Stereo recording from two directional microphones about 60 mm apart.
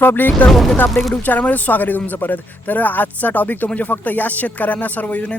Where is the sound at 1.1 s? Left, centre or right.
Left.